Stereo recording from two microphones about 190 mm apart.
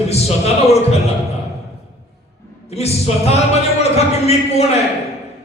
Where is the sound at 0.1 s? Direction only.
35° left (ahead or behind).